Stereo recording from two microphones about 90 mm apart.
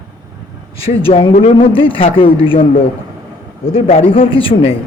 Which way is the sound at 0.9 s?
90° left.